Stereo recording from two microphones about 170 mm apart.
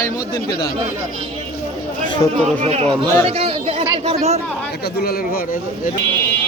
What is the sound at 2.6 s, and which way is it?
Speech, 35° right (ahead or behind).